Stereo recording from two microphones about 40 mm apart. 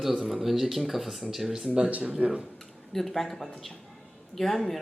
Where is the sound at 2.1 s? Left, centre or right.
Right.